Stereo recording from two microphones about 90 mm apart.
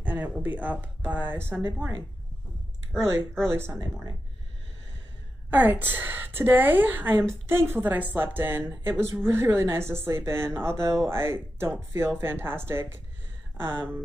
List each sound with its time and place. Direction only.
0.0 s a woman's voice: 20° right (ahead or behind)
2.9 s speech: 5° left (ahead or behind)
3.4 s a woman's voice: 25° right (ahead or behind)
5.5 s a woman's voice: 20° right (ahead or behind)